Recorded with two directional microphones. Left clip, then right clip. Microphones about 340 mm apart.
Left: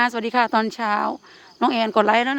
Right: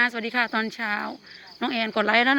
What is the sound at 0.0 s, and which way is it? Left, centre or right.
Speech, centre.